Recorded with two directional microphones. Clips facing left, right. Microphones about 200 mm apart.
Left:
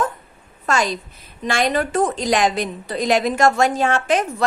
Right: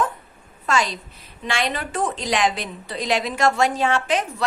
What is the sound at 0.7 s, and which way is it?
A woman's voice, 45° left (ahead or behind).